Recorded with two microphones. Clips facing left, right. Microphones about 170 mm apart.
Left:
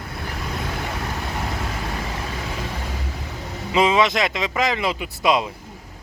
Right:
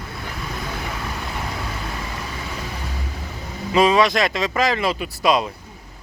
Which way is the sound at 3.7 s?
20° left (ahead or behind).